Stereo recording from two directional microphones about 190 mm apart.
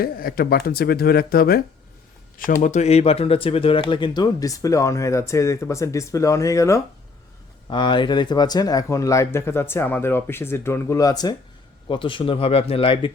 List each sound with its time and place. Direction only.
0.0 s speech: 50° left (ahead or behind); by 13.1 s 30° left (ahead or behind)